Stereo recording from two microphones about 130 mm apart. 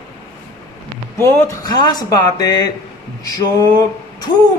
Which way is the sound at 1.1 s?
20° left (ahead or behind).